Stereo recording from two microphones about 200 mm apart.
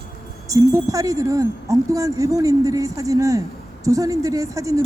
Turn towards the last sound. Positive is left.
turn(degrees=-15)  # may be behind; listen again after turning